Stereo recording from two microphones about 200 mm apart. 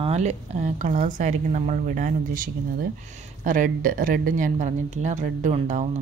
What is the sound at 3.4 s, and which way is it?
Speech, 40° right (ahead or behind).